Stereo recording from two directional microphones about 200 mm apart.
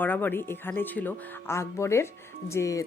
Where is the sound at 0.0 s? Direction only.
10° left (ahead or behind).